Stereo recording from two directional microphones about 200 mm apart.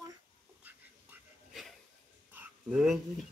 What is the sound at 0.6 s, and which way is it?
Dog, 5° right (ahead or behind).